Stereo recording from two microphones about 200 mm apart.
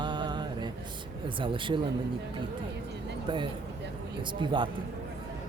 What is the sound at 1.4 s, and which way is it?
Speech, 25° right (ahead or behind).